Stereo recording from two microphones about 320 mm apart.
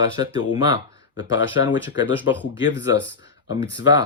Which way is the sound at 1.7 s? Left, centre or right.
Left.